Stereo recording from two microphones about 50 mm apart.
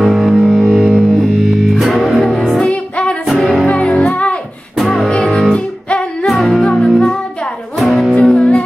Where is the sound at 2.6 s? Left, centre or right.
Left.